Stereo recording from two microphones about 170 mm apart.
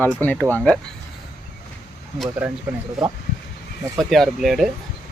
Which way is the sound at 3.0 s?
Centre (ahead or behind).